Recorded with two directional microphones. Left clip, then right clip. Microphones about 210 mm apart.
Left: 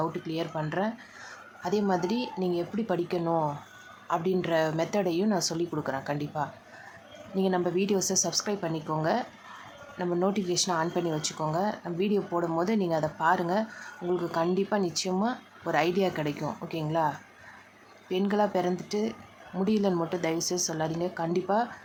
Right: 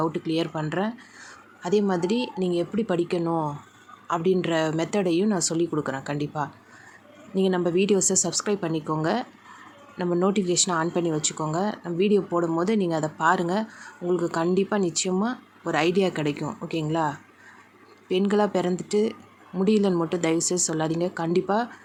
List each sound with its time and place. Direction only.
0.0 s speech: 15° right (ahead or behind)